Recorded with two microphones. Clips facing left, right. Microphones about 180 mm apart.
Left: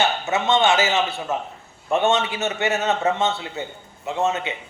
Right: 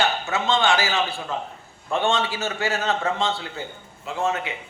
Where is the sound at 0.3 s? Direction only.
20° left (ahead or behind).